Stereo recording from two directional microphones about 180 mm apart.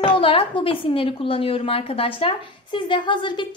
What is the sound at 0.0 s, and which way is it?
A woman's voice, 30° left (ahead or behind).